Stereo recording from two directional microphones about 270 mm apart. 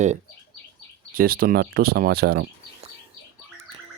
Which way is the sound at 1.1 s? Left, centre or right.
Right.